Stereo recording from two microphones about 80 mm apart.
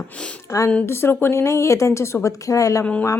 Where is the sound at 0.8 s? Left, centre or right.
Left.